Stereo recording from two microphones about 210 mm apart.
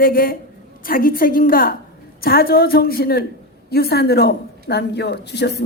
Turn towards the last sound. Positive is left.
turn(degrees=50)  # may be behind; listen again after turning